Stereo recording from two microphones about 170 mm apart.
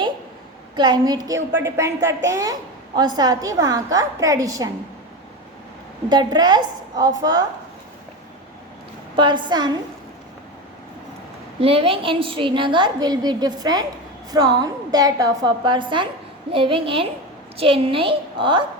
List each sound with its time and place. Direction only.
0.8 s a woman's voice: 25° right (ahead or behind)
6.1 s a woman's voice: 25° right (ahead or behind)
9.1 s a woman's voice: 25° right (ahead or behind)
11.6 s a woman's voice: 35° right (ahead or behind)